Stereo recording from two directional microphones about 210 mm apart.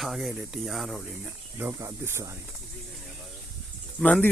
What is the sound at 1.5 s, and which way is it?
Speech, 10° right (ahead or behind).